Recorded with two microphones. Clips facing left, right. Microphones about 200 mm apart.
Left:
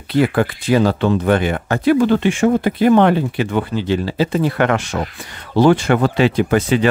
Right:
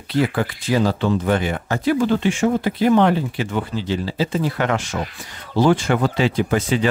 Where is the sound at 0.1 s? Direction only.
60° left (ahead or behind).